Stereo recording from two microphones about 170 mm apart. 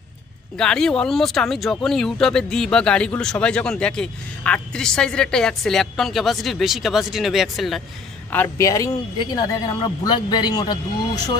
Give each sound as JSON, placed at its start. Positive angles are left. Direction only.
{"t": 0.6, "sound": "speech", "side_deg": 5}
{"t": 8.3, "sound": "speech", "side_deg": 15}